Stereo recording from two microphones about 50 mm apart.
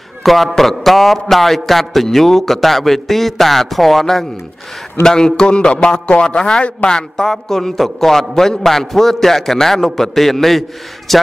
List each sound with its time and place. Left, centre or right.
0.2 s a man's voice: centre